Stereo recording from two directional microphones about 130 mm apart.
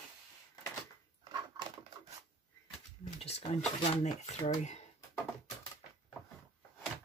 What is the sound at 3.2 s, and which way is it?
Speech, 55° left (ahead or behind).